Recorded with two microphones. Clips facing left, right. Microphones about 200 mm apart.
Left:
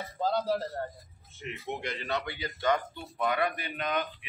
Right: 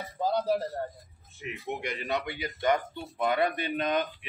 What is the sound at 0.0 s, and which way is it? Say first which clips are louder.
Speech: right 1 dB; 15° right (ahead or behind).